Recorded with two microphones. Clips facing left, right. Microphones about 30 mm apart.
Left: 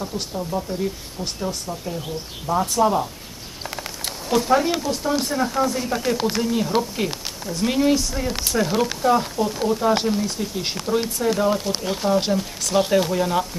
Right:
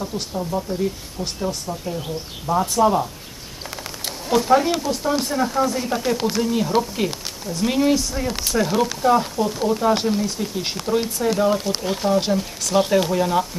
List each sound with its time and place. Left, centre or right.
0.0 s speech: centre